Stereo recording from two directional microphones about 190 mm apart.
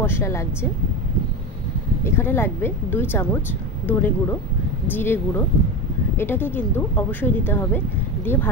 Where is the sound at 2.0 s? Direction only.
10° left (ahead or behind).